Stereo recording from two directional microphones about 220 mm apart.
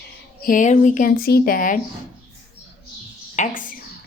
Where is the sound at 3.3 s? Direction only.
35° left (ahead or behind).